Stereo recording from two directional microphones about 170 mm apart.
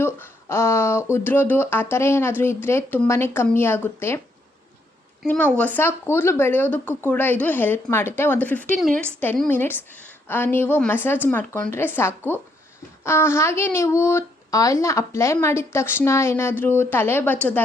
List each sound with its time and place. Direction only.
0.0 s speech: 15° left (ahead or behind)
5.2 s speech: 10° left (ahead or behind)